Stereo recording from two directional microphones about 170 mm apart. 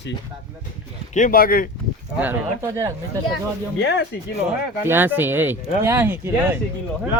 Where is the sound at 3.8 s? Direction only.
90° left.